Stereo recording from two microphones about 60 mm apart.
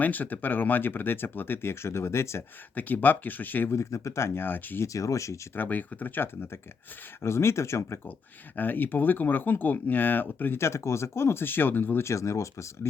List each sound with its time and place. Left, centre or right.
0.0 s speech: left
2.7 s speech: left
3.7 s speech: left
4.4 s speech: left
4.9 s speech: left
5.5 s speech: left
7.2 s speech: left
8.5 s speech: left
10.6 s speech: left
12.0 s speech: left